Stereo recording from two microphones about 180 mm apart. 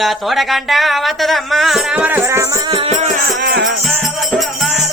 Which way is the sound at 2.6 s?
30° right (ahead or behind).